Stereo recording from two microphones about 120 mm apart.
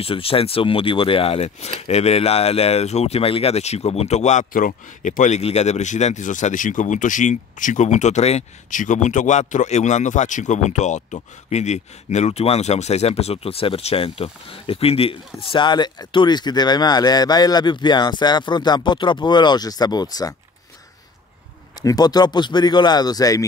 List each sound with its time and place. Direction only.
0.0 s speech: 50° left (ahead or behind); by 20.3 s 30° left (ahead or behind)
21.8 s speech: 35° left (ahead or behind)